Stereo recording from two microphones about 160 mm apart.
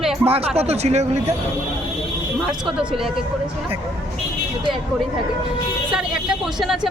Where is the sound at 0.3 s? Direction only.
40° right (ahead or behind).